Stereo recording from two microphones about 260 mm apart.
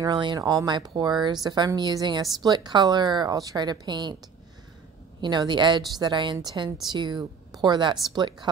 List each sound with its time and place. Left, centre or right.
0.0 s a woman's voice: centre
5.2 s a woman's voice: centre